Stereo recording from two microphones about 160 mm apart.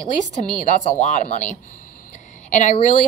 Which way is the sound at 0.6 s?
50° left (ahead or behind).